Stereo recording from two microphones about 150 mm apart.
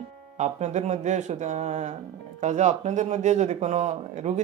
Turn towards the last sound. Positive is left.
turn(degrees=-50)  # may be behind; listen again after turning